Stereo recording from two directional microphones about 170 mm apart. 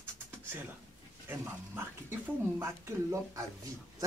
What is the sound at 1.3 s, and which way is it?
Speech, 10° right (ahead or behind).